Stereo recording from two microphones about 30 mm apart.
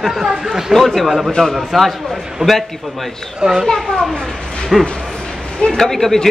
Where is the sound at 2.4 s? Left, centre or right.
Right.